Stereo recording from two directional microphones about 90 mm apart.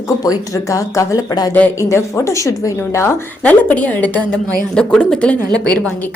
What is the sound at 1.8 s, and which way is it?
A woman's voice, 30° left (ahead or behind).